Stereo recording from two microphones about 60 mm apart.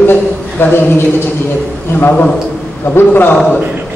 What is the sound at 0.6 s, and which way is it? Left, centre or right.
A man's voice, left.